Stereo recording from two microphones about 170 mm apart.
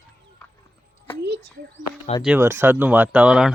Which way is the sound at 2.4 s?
15° right (ahead or behind).